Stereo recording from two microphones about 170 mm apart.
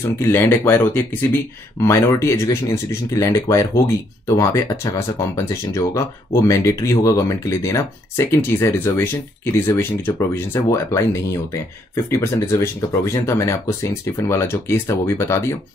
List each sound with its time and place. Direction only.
0.2 s speech: 15° left (ahead or behind)